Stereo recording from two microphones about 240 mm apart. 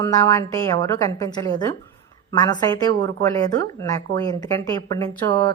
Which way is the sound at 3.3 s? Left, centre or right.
Centre.